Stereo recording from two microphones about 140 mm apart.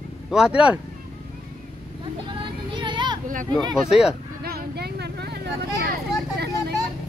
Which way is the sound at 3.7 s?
5° right (ahead or behind).